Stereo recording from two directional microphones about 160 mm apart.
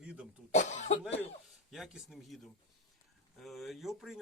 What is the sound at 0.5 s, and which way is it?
Cough, 50° left (ahead or behind).